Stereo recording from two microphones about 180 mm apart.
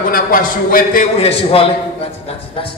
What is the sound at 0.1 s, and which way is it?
Speech, 50° left (ahead or behind).